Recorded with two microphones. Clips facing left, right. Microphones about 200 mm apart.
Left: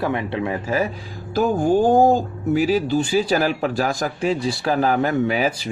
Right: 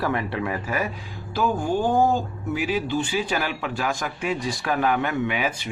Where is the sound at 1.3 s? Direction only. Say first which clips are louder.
Left 6 dB; 45° left (ahead or behind).